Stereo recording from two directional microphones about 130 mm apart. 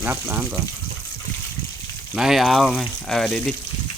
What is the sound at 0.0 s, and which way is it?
Speech, 20° right (ahead or behind).